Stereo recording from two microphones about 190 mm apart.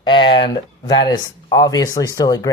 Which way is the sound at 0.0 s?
25° left (ahead or behind).